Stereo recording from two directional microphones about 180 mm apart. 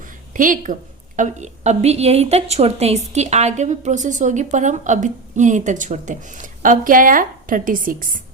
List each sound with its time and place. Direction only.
0.3 s a woman's voice: 45° right (ahead or behind)